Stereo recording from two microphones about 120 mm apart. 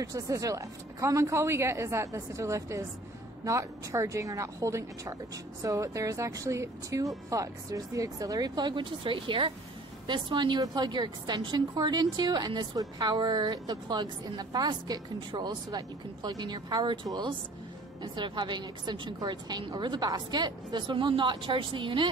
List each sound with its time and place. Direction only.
0.0 s a woman's voice: 30° right (ahead or behind); by 22.0 s 45° right (ahead or behind)